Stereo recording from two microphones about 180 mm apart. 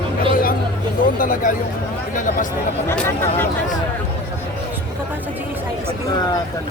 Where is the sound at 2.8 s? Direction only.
15° left (ahead or behind).